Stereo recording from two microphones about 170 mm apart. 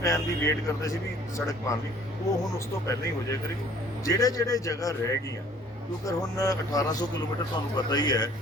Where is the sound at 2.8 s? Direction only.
15° left (ahead or behind).